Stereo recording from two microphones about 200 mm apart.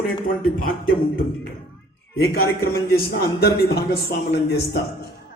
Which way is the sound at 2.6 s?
50° left (ahead or behind).